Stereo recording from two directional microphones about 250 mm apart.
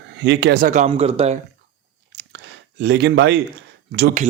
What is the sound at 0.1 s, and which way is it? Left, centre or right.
Speech, right.